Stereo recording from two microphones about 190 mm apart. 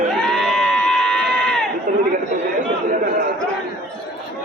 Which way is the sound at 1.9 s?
45° right (ahead or behind).